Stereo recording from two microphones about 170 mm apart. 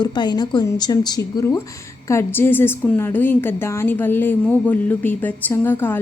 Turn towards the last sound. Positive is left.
turn(degrees=10)  # may be behind; listen again after turning